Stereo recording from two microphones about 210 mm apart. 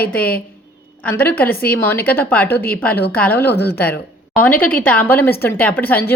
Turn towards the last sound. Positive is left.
turn(degrees=10)  # may be behind; listen again after turning